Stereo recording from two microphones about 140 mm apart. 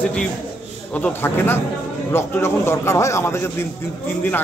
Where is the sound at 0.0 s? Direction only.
5° left (ahead or behind).